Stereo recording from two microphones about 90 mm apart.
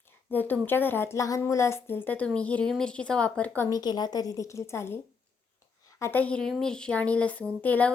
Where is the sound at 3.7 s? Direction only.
50° left (ahead or behind); by 5.0 s 30° left (ahead or behind).